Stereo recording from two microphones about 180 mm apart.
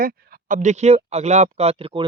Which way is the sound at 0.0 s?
45° right (ahead or behind).